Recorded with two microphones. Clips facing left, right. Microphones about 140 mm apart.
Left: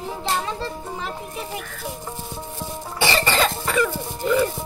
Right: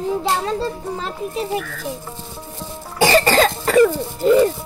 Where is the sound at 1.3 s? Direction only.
80° right.